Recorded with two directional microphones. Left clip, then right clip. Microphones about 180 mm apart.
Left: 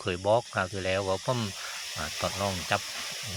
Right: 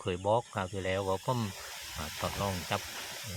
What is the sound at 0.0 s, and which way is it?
Speech, 5° left (ahead or behind).